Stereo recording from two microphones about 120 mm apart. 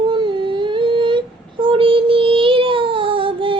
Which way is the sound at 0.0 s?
40° right (ahead or behind).